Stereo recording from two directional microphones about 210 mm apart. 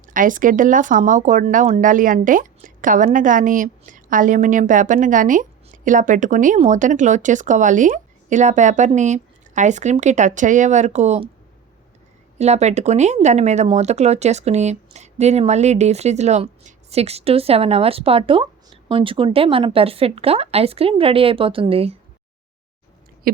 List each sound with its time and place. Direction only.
0.0 s speech: 40° right (ahead or behind)
12.4 s speech: 30° right (ahead or behind)
23.3 s owl: 40° right (ahead or behind)